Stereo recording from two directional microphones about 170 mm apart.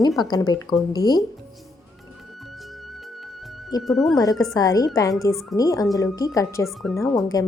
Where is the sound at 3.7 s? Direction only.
20° left (ahead or behind).